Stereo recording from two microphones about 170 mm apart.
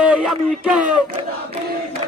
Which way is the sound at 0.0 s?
5° right (ahead or behind).